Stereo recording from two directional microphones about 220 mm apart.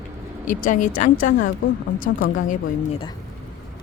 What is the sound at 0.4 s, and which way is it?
Speech, 35° left (ahead or behind).